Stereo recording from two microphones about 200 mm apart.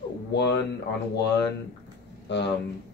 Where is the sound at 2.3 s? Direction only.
60° left (ahead or behind).